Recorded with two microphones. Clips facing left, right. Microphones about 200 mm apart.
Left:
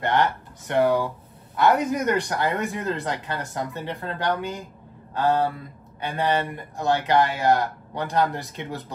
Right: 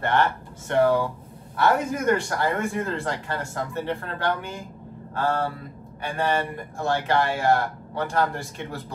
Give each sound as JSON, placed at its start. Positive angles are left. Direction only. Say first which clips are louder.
{"t": 0.0, "sound": "speech", "louder": "even", "side_deg": 15}